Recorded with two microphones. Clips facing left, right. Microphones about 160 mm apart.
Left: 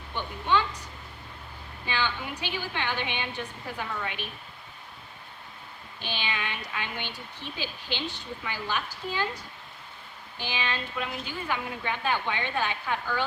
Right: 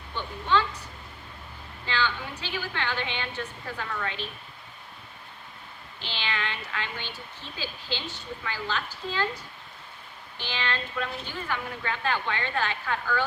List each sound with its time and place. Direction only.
0.2 s speech: 15° left (ahead or behind)
1.9 s speech: 15° left (ahead or behind)
6.0 s speech: 15° left (ahead or behind)